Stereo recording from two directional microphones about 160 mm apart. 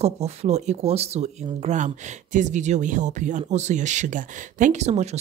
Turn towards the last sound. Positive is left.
turn(degrees=-45)  # may be behind; listen again after turning